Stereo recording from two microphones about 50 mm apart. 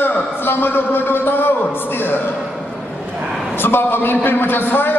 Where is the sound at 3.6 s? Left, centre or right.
Left.